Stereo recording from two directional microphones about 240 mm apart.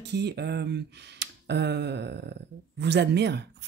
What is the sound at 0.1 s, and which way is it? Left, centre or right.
Speech, right.